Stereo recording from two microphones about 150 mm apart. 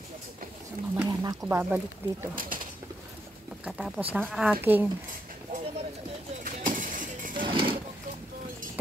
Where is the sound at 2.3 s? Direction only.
70° right (ahead or behind).